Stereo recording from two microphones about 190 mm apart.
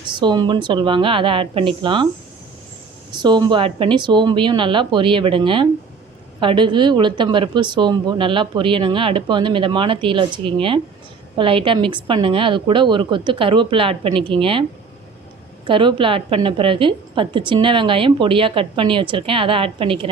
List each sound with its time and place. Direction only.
0.1 s a woman's voice: 25° right (ahead or behind)
3.1 s a woman's voice: 25° right (ahead or behind)
15.6 s a woman's voice: 25° right (ahead or behind)